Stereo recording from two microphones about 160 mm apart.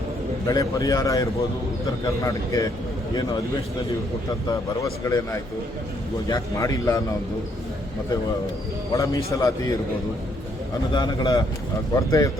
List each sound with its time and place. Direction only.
0.4 s speech: 20° left (ahead or behind)
8.9 s speech: 20° left (ahead or behind)
10.9 s speech: 25° left (ahead or behind)